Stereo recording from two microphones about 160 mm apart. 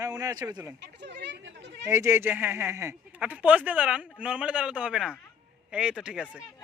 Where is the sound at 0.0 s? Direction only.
20° right (ahead or behind).